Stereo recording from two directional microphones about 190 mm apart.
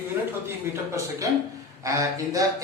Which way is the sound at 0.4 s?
15° right (ahead or behind).